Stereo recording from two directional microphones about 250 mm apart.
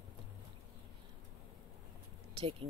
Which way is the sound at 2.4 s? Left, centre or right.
Right.